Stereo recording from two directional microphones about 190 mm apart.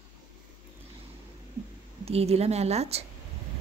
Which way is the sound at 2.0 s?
35° right (ahead or behind).